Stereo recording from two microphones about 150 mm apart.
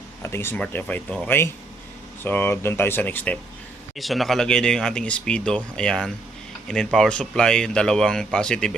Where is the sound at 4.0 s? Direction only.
Centre (ahead or behind).